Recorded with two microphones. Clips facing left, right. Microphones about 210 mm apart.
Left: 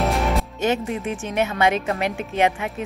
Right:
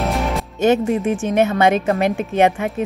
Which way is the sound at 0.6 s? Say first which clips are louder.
Right 12 dB; 50° right (ahead or behind).